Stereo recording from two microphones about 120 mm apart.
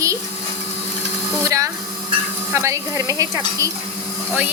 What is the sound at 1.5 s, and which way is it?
A woman's voice, 25° right (ahead or behind).